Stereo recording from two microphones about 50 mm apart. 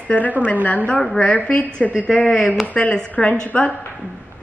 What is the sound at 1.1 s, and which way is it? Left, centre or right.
A woman's voice, left.